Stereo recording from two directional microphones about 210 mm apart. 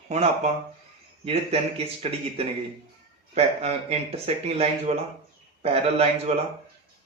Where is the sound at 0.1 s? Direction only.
30° right (ahead or behind).